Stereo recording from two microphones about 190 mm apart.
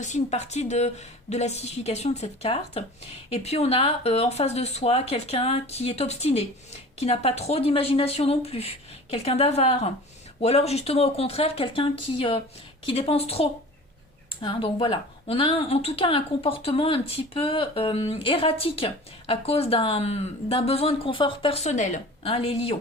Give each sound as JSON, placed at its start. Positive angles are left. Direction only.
{"t": 0.0, "sound": "a woman's voice", "side_deg": 35}